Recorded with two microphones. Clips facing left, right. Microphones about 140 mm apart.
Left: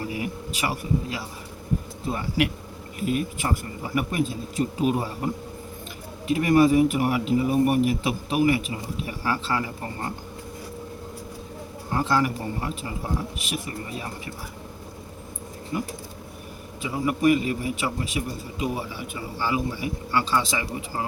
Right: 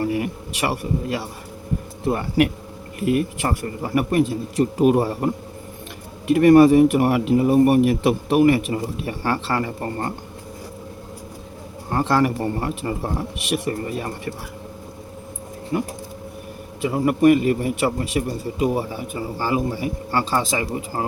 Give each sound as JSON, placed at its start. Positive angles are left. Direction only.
{"t": 0.0, "sound": "speech", "side_deg": -60}
{"t": 4.6, "sound": "speech", "side_deg": -55}
{"t": 6.3, "sound": "speech", "side_deg": -60}
{"t": 11.9, "sound": "speech", "side_deg": -65}
{"t": 16.8, "sound": "speech", "side_deg": -60}
{"t": 18.8, "sound": "a man's voice", "side_deg": -40}